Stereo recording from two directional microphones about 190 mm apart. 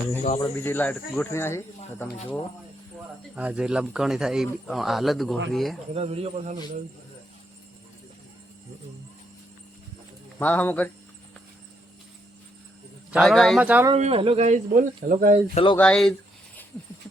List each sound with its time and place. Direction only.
0.3 s speech: 15° left (ahead or behind)
3.3 s speech: 5° right (ahead or behind)
5.9 s speech: 30° right (ahead or behind)
10.3 s speech: 5° left (ahead or behind)
13.1 s speech: centre (ahead or behind)
13.9 s speech: 30° right (ahead or behind)
15.5 s speech: 25° left (ahead or behind)
15.8 s speech: 5° left (ahead or behind)